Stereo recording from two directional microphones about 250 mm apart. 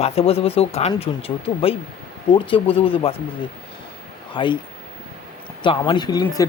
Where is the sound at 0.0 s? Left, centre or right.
Left.